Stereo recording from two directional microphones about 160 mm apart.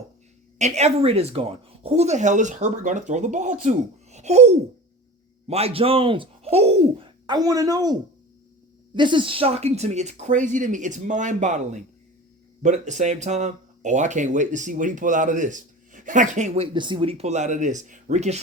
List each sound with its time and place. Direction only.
0.6 s speech: 45° right (ahead or behind)
7.3 s speech: 25° right (ahead or behind)
9.0 s speech: 30° right (ahead or behind); by 16.5 s 50° right (ahead or behind)
16.6 s speech: 30° right (ahead or behind); by 18.3 s 45° right (ahead or behind)